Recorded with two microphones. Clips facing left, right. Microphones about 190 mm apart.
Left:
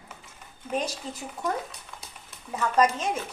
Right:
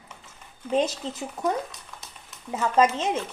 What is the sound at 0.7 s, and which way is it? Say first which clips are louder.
Speech: right 6 dB; 25° right (ahead or behind).